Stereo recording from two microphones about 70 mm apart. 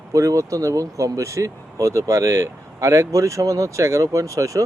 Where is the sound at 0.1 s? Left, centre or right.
Right.